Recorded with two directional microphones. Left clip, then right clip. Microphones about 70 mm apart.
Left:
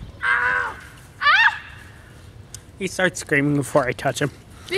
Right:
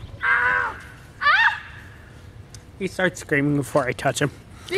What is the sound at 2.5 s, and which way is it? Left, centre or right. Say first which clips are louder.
Speech: left 1 dB; left.